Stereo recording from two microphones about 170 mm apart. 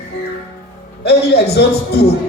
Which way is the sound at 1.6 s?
70° left (ahead or behind).